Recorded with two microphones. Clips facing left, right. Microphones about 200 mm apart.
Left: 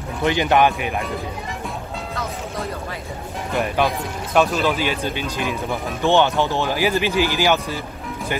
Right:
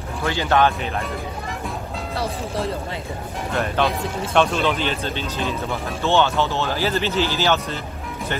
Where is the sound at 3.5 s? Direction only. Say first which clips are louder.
Left 1 dB; 10° left (ahead or behind).